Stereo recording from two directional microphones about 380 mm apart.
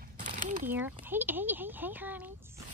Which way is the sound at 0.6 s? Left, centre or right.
Centre.